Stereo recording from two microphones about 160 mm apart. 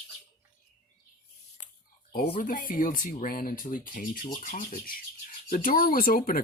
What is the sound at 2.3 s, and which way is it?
Speech, 60° left (ahead or behind).